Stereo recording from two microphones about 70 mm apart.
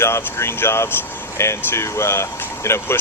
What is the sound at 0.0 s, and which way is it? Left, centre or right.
Speech, left.